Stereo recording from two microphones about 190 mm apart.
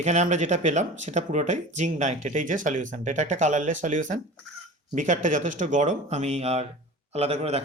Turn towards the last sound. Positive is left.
turn(degrees=-35)  # may be behind; listen again after turning